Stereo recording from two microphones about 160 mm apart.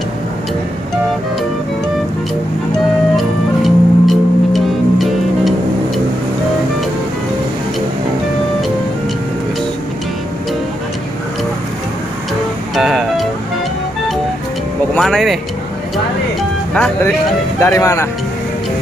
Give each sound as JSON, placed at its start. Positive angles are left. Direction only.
{"t": 3.2, "sound": "music", "side_deg": 0}
{"t": 12.7, "sound": "music", "side_deg": 0}
{"t": 15.0, "sound": "speech", "side_deg": 0}
{"t": 16.7, "sound": "speech", "side_deg": 10}
{"t": 17.6, "sound": "speech", "side_deg": 20}